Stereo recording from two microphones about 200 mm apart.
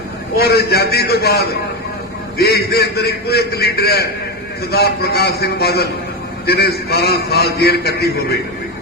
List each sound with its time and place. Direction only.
0.3 s a man's voice: 50° left (ahead or behind)